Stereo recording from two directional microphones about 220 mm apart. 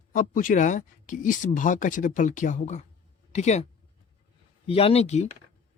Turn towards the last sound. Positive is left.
turn(degrees=30)  # may be behind; listen again after turning